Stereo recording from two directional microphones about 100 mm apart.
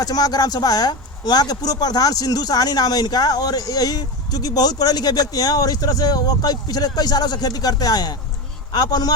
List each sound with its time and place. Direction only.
0.0 s speech: 40° left (ahead or behind)